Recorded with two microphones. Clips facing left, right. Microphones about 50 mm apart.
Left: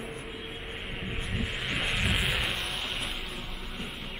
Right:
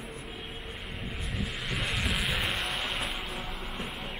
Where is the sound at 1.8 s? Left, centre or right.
Centre.